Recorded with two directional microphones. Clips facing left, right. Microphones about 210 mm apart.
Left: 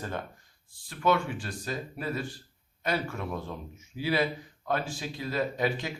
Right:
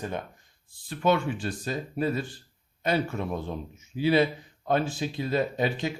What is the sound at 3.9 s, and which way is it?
Speech, 25° right (ahead or behind).